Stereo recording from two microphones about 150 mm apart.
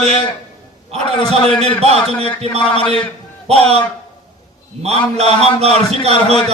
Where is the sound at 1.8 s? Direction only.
45° right (ahead or behind).